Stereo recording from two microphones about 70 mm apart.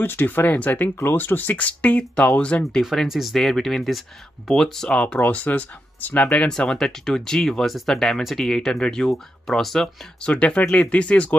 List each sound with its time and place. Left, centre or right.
0.0 s speech: left
2.6 s speech: centre; by 6.2 s left
6.2 s speech: centre
10.2 s speech: centre